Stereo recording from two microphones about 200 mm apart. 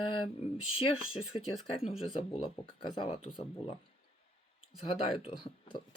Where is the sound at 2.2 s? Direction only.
25° left (ahead or behind).